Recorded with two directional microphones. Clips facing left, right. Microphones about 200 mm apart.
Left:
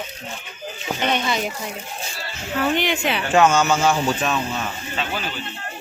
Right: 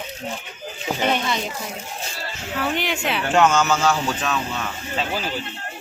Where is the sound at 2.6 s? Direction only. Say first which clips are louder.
Left 3 dB; centre (ahead or behind).